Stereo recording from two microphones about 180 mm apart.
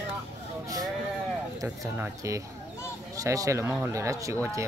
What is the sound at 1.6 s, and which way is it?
Speech, 20° right (ahead or behind).